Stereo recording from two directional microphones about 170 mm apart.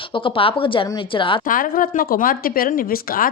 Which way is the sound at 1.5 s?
55° left (ahead or behind).